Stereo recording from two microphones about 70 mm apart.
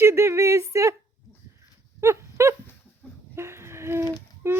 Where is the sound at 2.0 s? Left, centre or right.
Right.